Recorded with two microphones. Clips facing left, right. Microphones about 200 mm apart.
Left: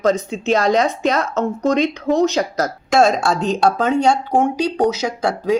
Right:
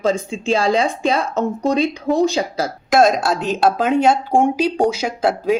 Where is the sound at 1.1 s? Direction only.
15° right (ahead or behind).